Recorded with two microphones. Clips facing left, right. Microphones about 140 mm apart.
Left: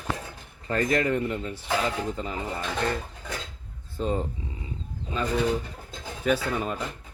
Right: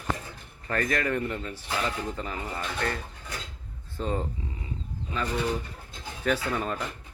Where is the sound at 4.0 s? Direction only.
20° left (ahead or behind).